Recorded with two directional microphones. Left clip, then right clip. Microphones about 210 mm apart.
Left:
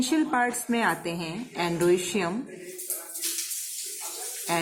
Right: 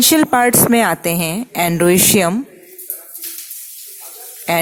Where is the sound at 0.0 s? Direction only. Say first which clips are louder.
Right 12 dB; 55° right (ahead or behind).